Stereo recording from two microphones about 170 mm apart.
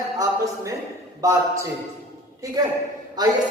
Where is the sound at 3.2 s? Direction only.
25° right (ahead or behind).